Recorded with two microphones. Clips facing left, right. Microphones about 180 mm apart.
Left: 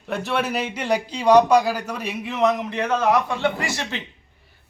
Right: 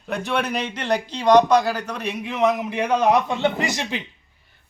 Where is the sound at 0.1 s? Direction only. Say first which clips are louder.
Even; centre (ahead or behind); by 4.0 s 15° right (ahead or behind).